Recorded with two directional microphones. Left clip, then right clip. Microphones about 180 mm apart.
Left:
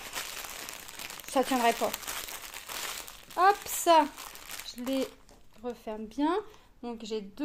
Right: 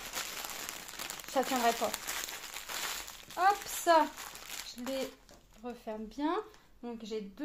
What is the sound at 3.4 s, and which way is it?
Speech, 65° left (ahead or behind).